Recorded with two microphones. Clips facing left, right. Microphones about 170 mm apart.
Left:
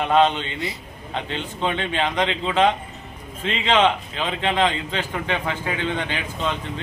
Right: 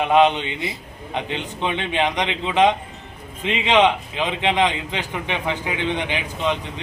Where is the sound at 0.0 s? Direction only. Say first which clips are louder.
Right 2 dB; 15° right (ahead or behind).